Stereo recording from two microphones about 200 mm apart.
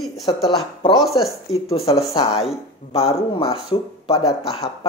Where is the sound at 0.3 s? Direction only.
25° left (ahead or behind).